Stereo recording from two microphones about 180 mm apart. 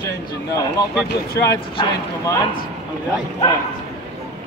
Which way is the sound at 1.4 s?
20° left (ahead or behind).